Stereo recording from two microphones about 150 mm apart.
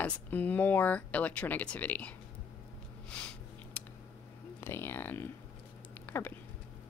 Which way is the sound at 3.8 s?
10° left (ahead or behind).